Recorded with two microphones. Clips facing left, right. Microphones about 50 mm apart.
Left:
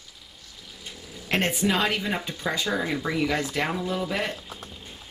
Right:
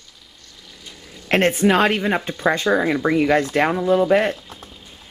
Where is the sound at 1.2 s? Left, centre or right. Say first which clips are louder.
Right 8 dB; right.